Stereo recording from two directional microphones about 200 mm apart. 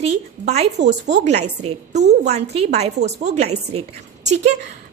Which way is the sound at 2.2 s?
35° right (ahead or behind).